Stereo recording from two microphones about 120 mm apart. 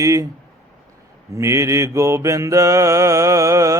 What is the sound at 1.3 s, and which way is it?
Mantra, 25° right (ahead or behind).